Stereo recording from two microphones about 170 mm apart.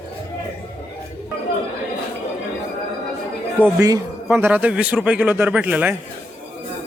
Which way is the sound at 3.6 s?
15° right (ahead or behind).